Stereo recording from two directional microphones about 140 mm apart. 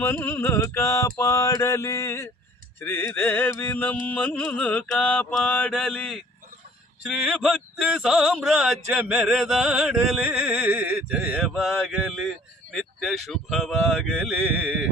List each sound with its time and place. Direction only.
0.0 s mantra: 15° left (ahead or behind)
7.0 s speech: 5° right (ahead or behind)